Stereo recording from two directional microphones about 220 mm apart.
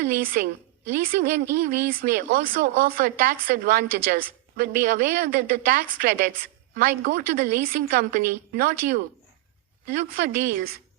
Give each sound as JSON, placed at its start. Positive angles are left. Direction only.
{"t": 0.0, "sound": "speech", "side_deg": -40}